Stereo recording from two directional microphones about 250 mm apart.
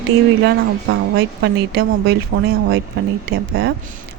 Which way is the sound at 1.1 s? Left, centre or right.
Right.